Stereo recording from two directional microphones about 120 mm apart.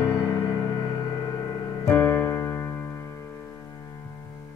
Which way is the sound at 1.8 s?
20° left (ahead or behind).